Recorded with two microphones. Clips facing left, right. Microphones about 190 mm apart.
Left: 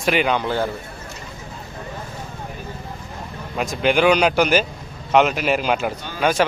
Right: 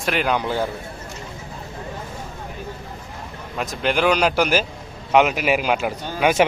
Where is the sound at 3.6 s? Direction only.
Centre (ahead or behind).